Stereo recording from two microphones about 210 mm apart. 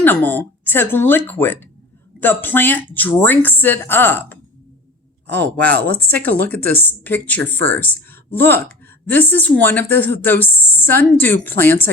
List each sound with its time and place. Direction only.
0.0 s speech: 10° left (ahead or behind)
5.5 s speech: 5° left (ahead or behind)
5.9 s speech: 45° right (ahead or behind)
6.1 s speech: 10° left (ahead or behind)